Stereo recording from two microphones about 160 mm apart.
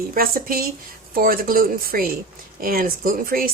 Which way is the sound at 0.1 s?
65° right (ahead or behind).